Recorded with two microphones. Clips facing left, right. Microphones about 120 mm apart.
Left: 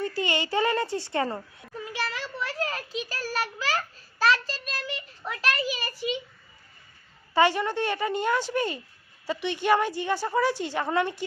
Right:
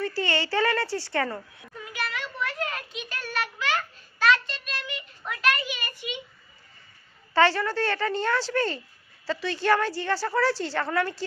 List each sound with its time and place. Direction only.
0.0 s speech: 20° left (ahead or behind)
1.8 s a sound: 30° left (ahead or behind)
7.3 s a woman's voice: 15° left (ahead or behind)